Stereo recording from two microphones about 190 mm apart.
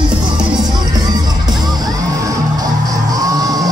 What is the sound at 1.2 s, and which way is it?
Music, 20° right (ahead or behind).